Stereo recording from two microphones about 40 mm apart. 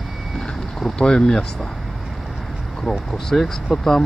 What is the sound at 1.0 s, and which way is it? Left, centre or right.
Speech, centre.